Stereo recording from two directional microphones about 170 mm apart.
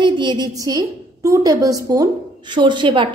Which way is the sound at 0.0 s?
25° right (ahead or behind).